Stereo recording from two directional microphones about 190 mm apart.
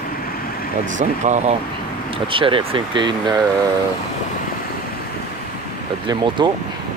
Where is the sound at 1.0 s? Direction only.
40° right (ahead or behind).